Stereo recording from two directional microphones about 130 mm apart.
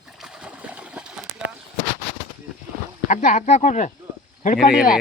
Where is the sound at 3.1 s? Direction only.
75° left (ahead or behind).